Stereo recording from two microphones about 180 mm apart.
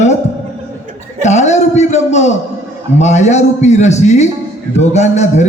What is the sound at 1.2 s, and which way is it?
A man's voice, 40° left (ahead or behind).